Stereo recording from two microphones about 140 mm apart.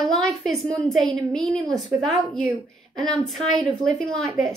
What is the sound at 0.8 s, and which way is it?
A woman's voice, centre (ahead or behind).